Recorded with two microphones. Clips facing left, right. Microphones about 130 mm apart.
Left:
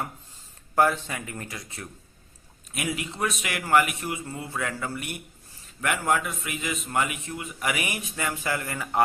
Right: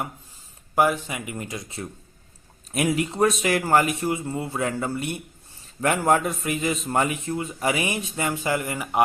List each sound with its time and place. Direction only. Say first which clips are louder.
0.8 s speech: right 1 dB; 15° right (ahead or behind)
2.7 s a man's voice: right 8 dB; 40° right (ahead or behind); by 9.0 s 15° right (ahead or behind)